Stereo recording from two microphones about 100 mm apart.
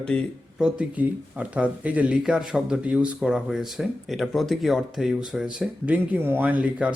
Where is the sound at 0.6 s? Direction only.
10° right (ahead or behind).